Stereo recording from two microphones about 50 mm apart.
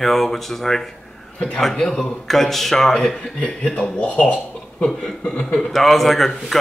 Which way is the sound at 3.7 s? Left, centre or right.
Left.